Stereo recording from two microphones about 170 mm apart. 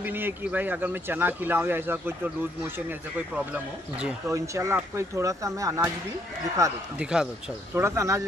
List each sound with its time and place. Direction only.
0.0 s speech: 10° right (ahead or behind)
3.5 s speech: 15° right (ahead or behind)
7.0 s speech: 5° right (ahead or behind)
7.7 s speech: 15° right (ahead or behind)